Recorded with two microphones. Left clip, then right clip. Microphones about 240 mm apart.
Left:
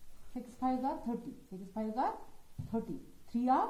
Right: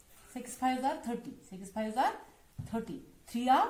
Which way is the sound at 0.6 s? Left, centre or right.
Right.